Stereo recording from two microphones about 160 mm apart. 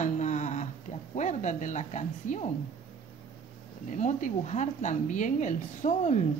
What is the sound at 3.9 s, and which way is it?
Speech, 50° left (ahead or behind).